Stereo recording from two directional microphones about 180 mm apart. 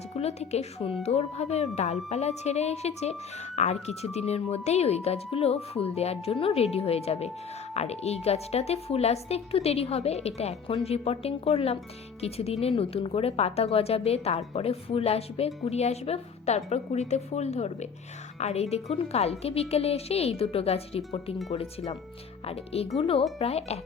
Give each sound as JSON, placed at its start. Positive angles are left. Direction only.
{"t": 0.2, "sound": "a woman's voice", "side_deg": 35}